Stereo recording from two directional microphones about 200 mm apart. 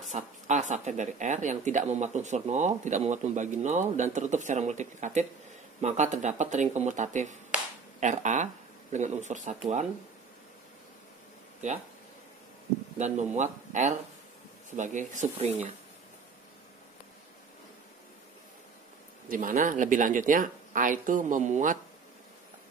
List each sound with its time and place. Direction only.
0.1 s speech: 35° right (ahead or behind)
12.9 s speech: 35° right (ahead or behind)
19.2 s speech: 45° right (ahead or behind)